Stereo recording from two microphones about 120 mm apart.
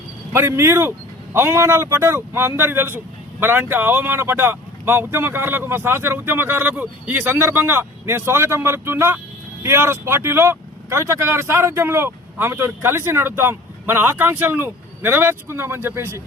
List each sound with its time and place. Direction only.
0.3 s speech: 20° right (ahead or behind)